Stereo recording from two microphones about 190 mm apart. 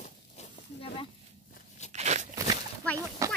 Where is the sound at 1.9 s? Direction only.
35° right (ahead or behind).